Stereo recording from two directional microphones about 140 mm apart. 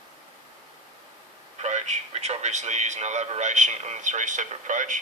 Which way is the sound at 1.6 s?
55° right (ahead or behind).